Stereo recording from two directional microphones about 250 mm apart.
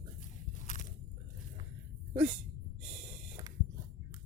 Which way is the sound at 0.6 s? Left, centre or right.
Left.